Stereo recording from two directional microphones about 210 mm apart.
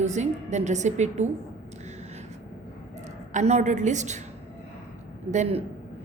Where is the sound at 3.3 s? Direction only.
35° right (ahead or behind).